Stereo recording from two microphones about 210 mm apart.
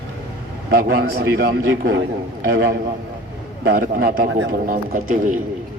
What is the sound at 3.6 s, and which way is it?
A man's voice, 45° right (ahead or behind).